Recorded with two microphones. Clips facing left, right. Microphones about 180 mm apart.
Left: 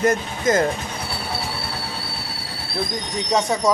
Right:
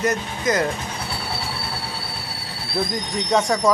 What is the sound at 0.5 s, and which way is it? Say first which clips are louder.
Speech: left 3 dB; 50° left (ahead or behind).